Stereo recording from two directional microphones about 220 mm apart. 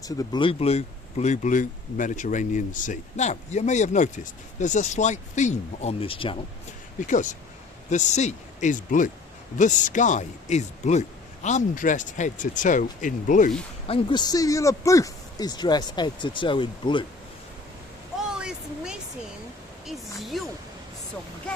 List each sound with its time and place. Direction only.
0.0 s speech: 20° left (ahead or behind)
7.9 s speech: 30° left (ahead or behind)
13.8 s speech: 25° left (ahead or behind)
18.3 s a sound: 5° right (ahead or behind)
19.9 s speech: centre (ahead or behind)